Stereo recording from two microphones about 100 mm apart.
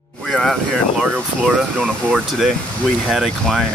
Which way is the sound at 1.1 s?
5° right (ahead or behind).